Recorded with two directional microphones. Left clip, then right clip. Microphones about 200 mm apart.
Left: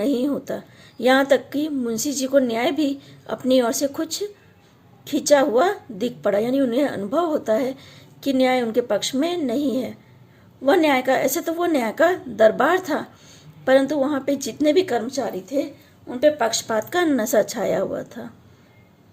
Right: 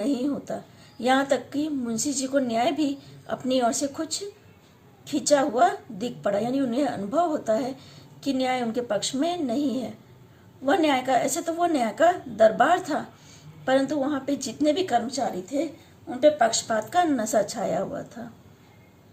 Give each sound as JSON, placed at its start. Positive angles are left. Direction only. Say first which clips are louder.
{"t": 0.0, "sound": "a woman's voice", "louder": "left 5 dB", "side_deg": 45}